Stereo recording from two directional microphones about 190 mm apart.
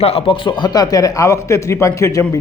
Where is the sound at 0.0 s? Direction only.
30° left (ahead or behind).